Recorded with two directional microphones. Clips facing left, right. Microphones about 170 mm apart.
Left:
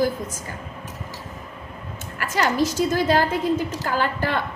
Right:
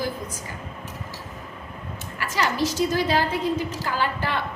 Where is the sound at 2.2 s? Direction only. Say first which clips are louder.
Left 3 dB; 50° left (ahead or behind).